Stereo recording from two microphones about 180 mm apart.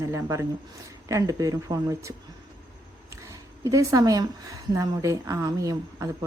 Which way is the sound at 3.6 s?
20° right (ahead or behind).